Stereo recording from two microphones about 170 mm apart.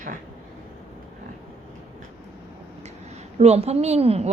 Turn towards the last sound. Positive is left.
turn(degrees=-35)  # may be behind; listen again after turning